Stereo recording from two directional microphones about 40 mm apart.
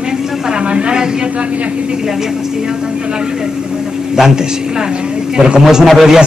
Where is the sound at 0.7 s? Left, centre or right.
Right.